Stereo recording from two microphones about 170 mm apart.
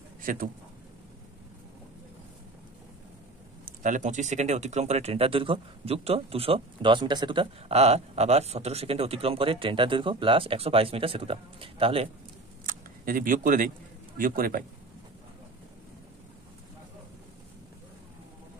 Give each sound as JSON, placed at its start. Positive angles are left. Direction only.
{"t": 0.2, "sound": "speech", "side_deg": -55}
{"t": 3.6, "sound": "speech", "side_deg": -45}
{"t": 12.6, "sound": "camera", "side_deg": -55}
{"t": 14.1, "sound": "speech", "side_deg": -55}